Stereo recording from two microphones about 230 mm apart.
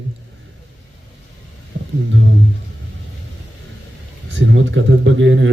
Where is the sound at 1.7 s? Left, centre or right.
Right.